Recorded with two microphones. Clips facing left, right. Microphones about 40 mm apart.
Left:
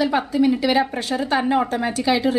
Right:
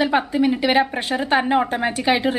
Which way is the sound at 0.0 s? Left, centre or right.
Right.